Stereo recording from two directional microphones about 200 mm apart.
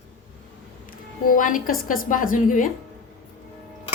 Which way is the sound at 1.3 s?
45° left (ahead or behind).